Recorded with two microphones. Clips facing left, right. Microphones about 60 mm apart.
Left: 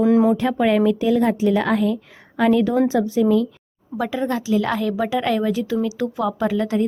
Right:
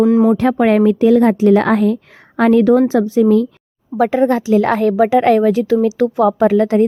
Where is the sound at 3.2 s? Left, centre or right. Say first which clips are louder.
Right 6 dB; right.